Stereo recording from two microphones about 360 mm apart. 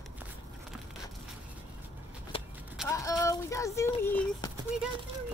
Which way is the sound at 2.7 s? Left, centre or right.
Centre.